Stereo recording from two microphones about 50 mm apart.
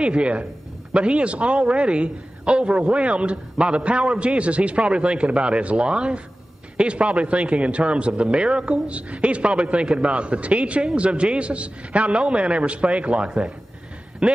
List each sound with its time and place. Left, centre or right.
0.0 s a man's voice: right